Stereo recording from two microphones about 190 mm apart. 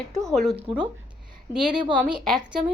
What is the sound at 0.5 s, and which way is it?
Speech, 25° right (ahead or behind).